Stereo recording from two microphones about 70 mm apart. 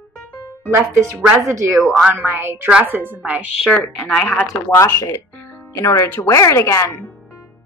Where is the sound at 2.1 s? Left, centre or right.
Right.